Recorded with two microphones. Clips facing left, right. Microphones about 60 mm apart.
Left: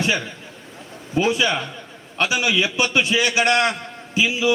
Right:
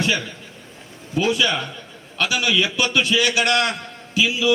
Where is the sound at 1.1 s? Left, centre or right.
Left.